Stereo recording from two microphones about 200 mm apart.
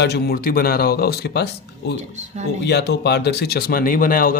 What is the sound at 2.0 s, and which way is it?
Speech, 35° right (ahead or behind).